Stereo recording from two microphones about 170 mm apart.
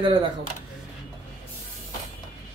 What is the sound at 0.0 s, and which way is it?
Speech, 30° right (ahead or behind).